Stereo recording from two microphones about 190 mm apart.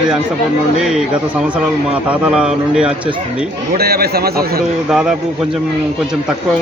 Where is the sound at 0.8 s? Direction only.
5° right (ahead or behind).